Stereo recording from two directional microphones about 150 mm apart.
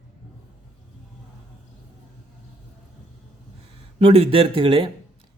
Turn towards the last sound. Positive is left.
turn(degrees=-35)  # may be behind; listen again after turning